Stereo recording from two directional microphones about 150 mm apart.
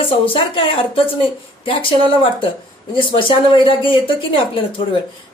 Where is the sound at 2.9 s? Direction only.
35° left (ahead or behind).